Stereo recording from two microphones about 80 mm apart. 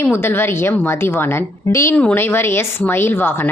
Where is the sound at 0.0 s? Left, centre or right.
Left.